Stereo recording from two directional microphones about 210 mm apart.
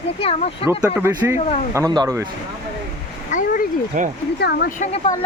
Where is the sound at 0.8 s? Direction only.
15° right (ahead or behind).